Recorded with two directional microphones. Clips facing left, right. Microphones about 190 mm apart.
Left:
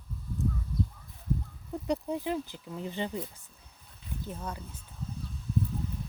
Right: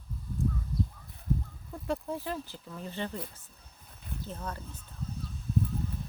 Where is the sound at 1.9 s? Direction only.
15° left (ahead or behind).